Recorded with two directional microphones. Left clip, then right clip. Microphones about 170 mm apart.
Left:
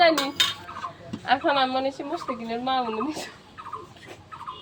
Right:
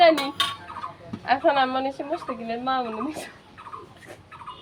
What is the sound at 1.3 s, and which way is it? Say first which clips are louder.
Speech: right 1 dB; 15° right (ahead or behind).